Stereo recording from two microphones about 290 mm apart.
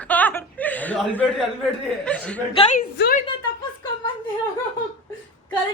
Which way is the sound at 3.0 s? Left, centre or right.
Left.